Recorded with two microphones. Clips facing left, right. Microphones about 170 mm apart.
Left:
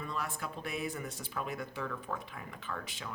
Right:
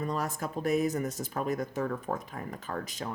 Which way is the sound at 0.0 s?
40° right (ahead or behind).